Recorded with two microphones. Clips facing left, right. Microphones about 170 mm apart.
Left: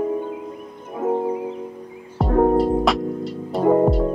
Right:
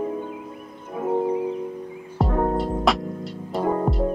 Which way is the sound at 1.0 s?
25° left (ahead or behind).